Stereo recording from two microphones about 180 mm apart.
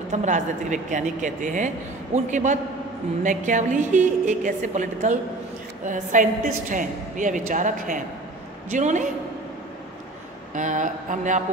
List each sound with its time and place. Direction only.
0.1 s a woman's voice: 40° right (ahead or behind)
10.5 s a woman's voice: 45° right (ahead or behind)